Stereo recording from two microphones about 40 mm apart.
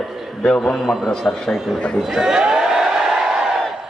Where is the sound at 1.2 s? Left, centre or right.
Left.